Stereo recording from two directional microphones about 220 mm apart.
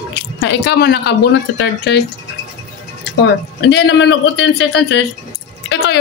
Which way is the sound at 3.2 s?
50° left (ahead or behind).